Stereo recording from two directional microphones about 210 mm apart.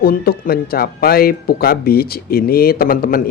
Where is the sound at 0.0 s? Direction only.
45° left (ahead or behind).